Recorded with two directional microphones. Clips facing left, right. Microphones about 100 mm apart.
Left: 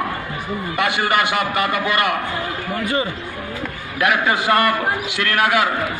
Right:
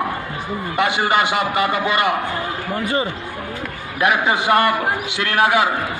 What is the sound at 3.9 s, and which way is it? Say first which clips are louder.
A man's voice: right 1 dB; 20° right (ahead or behind).